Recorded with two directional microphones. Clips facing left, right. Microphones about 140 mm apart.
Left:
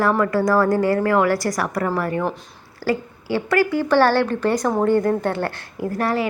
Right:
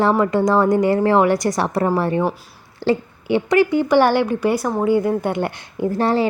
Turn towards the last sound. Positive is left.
turn(degrees=-25)  # may be behind; listen again after turning